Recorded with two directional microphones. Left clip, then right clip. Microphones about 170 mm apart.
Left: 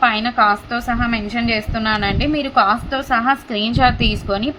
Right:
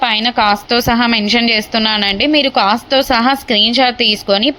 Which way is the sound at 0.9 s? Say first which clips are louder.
Right 7 dB; 35° right (ahead or behind).